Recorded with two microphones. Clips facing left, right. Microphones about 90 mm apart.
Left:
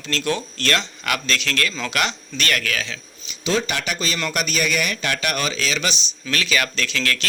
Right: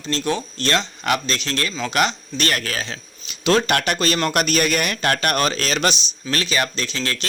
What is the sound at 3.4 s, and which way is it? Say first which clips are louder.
Speech: right 5 dB; 60° right (ahead or behind).